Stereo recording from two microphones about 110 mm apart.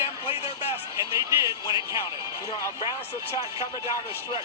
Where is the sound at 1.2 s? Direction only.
25° right (ahead or behind).